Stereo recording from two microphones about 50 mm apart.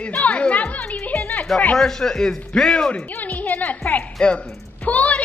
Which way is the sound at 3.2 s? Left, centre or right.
Left.